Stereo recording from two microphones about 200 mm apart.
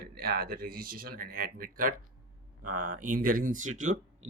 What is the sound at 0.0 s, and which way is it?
Speech, 50° right (ahead or behind).